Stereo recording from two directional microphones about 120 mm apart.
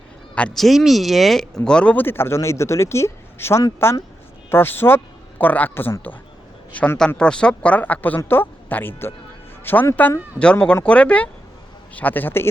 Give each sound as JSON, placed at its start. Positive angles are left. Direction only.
{"t": 0.3, "sound": "speech", "side_deg": 5}